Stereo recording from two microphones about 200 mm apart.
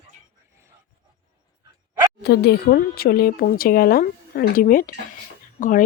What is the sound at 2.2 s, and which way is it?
Speech, 55° left (ahead or behind).